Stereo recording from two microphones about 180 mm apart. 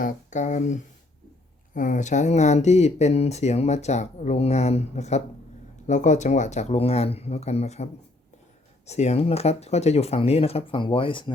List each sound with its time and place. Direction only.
0.0 s speech: 45° left (ahead or behind)
8.9 s speech: 35° left (ahead or behind)